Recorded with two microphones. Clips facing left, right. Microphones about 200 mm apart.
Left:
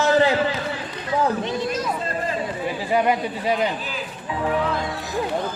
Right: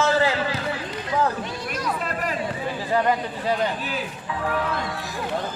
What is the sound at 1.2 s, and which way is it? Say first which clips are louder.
Speech: left 6 dB; 20° left (ahead or behind).